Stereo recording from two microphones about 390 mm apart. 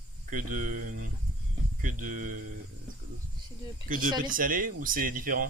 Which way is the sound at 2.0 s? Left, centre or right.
Centre.